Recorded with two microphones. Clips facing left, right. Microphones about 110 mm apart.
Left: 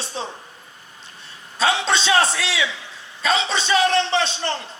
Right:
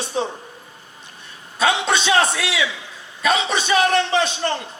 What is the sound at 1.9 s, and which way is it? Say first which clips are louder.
A man's voice: right 1 dB; 30° left (ahead or behind).